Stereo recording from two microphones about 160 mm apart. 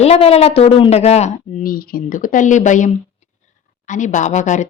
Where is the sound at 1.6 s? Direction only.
65° left (ahead or behind).